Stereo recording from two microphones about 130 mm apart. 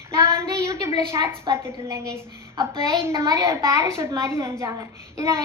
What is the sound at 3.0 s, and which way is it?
A woman's voice, 20° right (ahead or behind).